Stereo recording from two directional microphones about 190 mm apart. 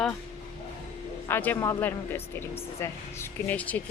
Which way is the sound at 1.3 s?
10° left (ahead or behind).